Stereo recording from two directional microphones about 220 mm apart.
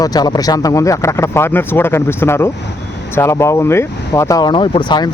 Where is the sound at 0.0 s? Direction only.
20° left (ahead or behind).